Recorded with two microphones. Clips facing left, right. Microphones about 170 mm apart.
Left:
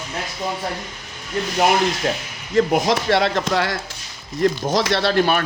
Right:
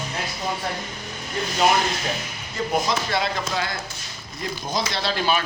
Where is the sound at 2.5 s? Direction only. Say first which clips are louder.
Left 7 dB; 75° left (ahead or behind).